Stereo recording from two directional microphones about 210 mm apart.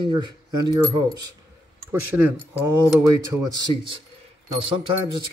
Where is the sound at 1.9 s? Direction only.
10° right (ahead or behind).